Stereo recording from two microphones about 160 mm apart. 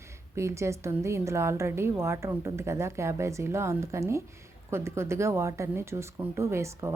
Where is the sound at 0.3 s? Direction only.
20° right (ahead or behind).